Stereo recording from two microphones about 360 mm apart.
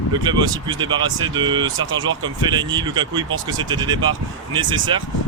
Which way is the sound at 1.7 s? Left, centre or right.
Right.